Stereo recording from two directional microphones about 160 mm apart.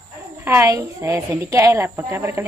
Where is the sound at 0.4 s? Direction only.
15° right (ahead or behind).